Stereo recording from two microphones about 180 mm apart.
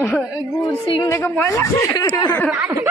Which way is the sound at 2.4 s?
Centre (ahead or behind).